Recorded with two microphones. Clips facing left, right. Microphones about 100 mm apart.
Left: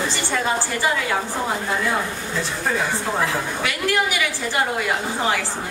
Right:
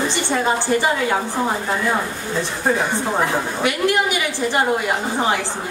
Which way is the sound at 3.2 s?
20° right (ahead or behind).